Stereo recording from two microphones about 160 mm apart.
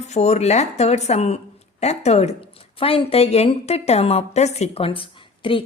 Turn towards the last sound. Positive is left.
turn(degrees=35)  # may be behind; listen again after turning